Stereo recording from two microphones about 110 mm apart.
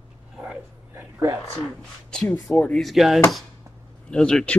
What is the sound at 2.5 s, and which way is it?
Speech, 5° left (ahead or behind).